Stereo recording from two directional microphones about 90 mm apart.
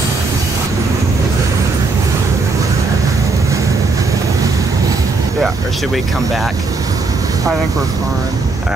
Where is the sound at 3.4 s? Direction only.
35° right (ahead or behind).